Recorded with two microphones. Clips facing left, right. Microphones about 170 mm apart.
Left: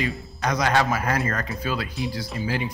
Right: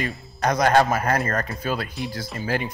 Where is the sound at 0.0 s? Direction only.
50° right (ahead or behind).